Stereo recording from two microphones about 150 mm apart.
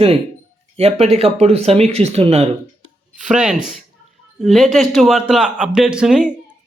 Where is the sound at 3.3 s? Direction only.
5° right (ahead or behind).